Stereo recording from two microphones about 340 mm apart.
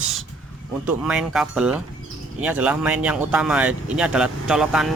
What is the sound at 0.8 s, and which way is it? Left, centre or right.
Speech, centre.